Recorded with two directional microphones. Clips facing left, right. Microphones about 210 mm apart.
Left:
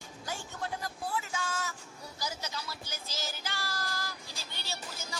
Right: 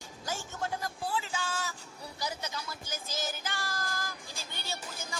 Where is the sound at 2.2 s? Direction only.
55° right (ahead or behind).